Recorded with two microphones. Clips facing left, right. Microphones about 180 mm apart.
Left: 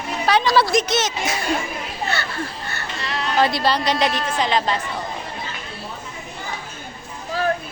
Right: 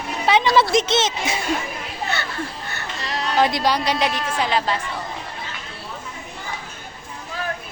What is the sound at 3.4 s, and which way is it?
A woman's voice, 15° right (ahead or behind).